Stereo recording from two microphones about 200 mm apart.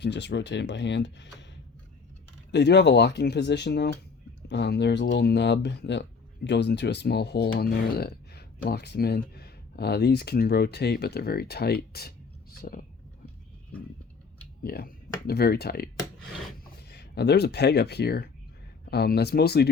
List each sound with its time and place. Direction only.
0.0 s speech: 60° left (ahead or behind)
2.5 s speech: 60° left (ahead or behind)
14.6 s speech: 50° left (ahead or behind)
16.9 s speech: 55° left (ahead or behind)